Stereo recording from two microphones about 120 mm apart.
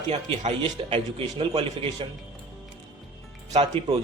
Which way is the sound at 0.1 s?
55° right (ahead or behind).